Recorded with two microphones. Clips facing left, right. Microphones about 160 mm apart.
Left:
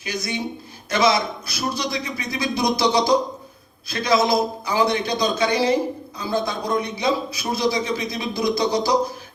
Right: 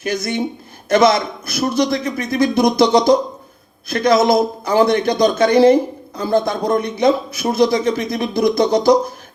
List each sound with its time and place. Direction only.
0.0 s speech: 55° right (ahead or behind)